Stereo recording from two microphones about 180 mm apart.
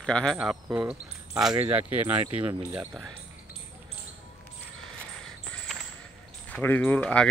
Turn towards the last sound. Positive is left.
turn(degrees=5)  # may be behind; listen again after turning